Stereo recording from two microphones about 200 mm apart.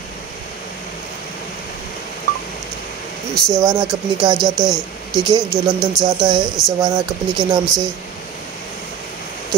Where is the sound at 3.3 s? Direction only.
5° left (ahead or behind).